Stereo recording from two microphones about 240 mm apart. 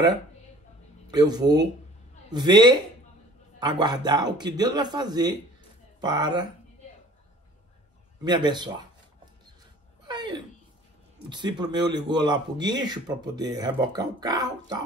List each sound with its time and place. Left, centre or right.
1.0 s speech: centre
8.2 s speech: centre
10.0 s a sound: centre
11.2 s speech: centre